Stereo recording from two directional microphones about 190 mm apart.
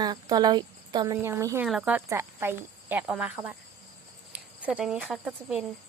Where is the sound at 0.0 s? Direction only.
20° right (ahead or behind).